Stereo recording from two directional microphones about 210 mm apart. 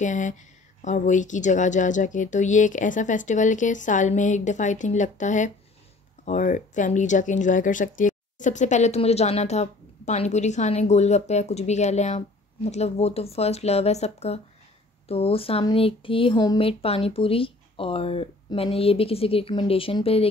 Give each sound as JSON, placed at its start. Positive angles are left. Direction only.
{"t": 0.0, "sound": "speech", "side_deg": 35}